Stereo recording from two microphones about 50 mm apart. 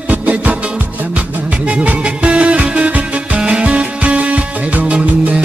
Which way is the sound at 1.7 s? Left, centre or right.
Right.